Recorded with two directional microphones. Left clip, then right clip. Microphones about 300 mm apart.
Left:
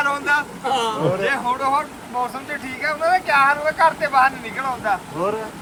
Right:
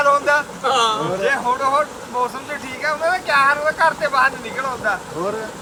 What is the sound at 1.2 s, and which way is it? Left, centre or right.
Speech, centre.